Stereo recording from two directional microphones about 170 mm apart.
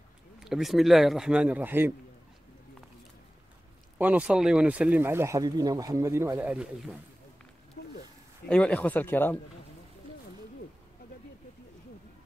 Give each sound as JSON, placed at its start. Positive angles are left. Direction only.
{"t": 0.4, "sound": "a man's voice", "side_deg": 0}
{"t": 4.0, "sound": "speech", "side_deg": -10}
{"t": 7.8, "sound": "a sound", "side_deg": 65}
{"t": 8.5, "sound": "speech", "side_deg": 5}